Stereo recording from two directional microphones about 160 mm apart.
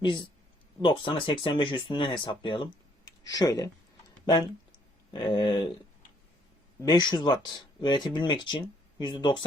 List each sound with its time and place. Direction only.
0.0 s speech: 30° left (ahead or behind)
6.8 s speech: 25° left (ahead or behind)